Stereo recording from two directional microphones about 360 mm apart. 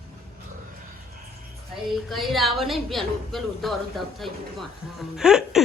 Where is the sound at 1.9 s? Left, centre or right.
Centre.